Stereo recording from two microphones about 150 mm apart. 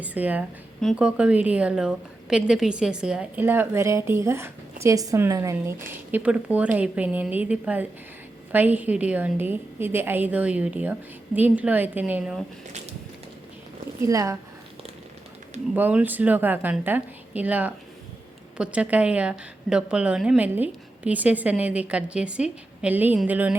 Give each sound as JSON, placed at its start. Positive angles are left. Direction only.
{"t": 0.0, "sound": "a woman's voice", "side_deg": -10}
{"t": 14.0, "sound": "speech", "side_deg": -20}
{"t": 15.7, "sound": "a woman's voice", "side_deg": -10}